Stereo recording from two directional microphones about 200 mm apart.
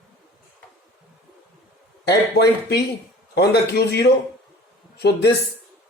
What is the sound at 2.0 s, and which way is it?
A man's voice, 55° left (ahead or behind).